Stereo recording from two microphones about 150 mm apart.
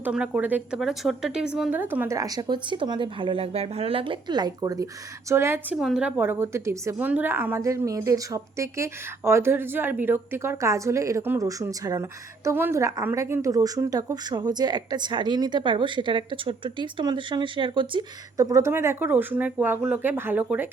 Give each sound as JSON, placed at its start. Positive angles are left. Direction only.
{"t": 0.0, "sound": "a woman's voice", "side_deg": -10}
{"t": 5.7, "sound": "a woman's voice", "side_deg": -5}
{"t": 18.3, "sound": "a woman's voice", "side_deg": -20}